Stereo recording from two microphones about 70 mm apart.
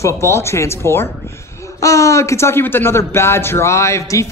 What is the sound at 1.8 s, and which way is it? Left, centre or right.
Speech, left.